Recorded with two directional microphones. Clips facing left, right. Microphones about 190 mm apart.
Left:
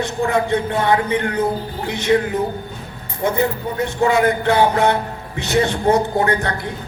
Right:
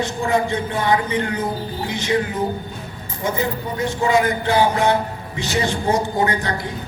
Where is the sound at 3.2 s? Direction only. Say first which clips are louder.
Left 4 dB; 60° left (ahead or behind).